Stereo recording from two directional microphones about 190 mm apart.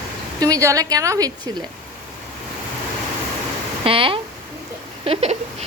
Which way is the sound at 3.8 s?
30° right (ahead or behind).